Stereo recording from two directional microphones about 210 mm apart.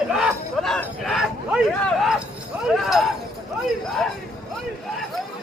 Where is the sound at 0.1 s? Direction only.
Centre (ahead or behind).